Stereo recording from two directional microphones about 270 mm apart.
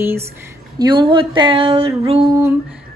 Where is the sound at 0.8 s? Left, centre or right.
Centre.